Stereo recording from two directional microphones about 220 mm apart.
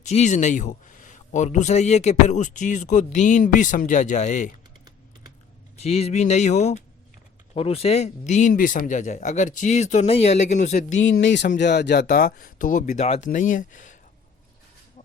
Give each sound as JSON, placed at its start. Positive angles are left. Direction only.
{"t": 0.0, "sound": "speech", "side_deg": 30}
{"t": 5.7, "sound": "speech", "side_deg": 30}
{"t": 11.2, "sound": "speech", "side_deg": 55}